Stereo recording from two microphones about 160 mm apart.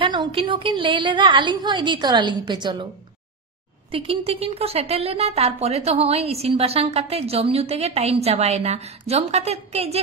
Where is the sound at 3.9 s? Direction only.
35° right (ahead or behind).